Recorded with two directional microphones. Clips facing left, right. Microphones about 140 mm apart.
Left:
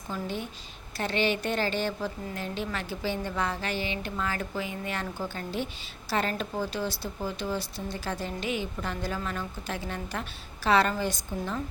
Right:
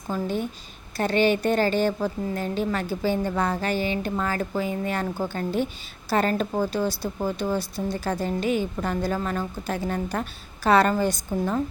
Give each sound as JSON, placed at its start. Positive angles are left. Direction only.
{"t": 0.1, "sound": "a woman's voice", "side_deg": -45}